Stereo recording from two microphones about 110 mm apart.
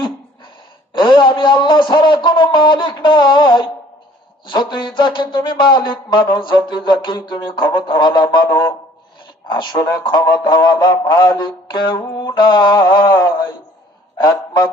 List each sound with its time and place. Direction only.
0.9 s music: 45° left (ahead or behind)
14.2 s a man's voice: 40° left (ahead or behind)